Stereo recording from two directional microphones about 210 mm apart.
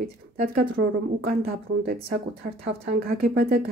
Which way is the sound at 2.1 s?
50° right (ahead or behind).